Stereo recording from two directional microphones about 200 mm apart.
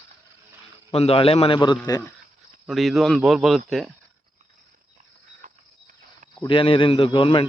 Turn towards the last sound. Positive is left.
turn(degrees=25)  # may be behind; listen again after turning